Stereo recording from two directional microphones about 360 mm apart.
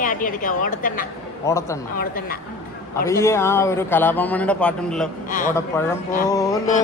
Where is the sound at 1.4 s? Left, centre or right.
Centre.